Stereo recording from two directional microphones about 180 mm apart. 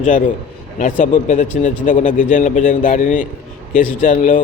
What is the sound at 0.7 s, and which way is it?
A man's voice, 50° left (ahead or behind).